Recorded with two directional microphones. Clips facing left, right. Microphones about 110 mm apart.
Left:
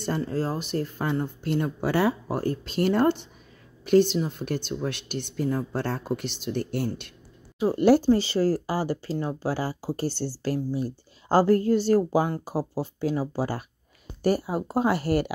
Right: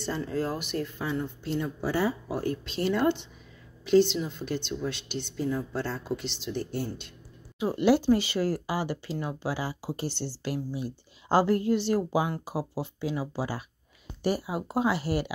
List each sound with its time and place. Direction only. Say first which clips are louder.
0.3 s speech: left 2 dB; 30° left (ahead or behind)
1.1 s speech: left 4 dB; 50° left (ahead or behind); by 2.3 s 70° left (ahead or behind)
2.3 s a woman's voice: left 3 dB; 40° left (ahead or behind); by 7.1 s 65° left (ahead or behind)
7.5 s a woman's voice: left 4 dB; 40° left (ahead or behind)